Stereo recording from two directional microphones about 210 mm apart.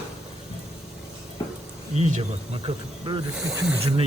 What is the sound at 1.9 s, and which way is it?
Speech, 35° right (ahead or behind).